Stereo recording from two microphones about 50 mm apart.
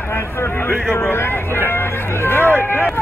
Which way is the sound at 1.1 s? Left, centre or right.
Left.